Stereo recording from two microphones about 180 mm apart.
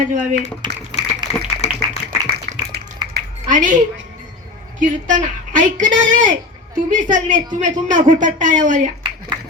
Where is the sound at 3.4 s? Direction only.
45° right (ahead or behind).